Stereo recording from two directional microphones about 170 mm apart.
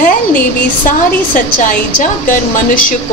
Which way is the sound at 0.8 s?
50° left (ahead or behind).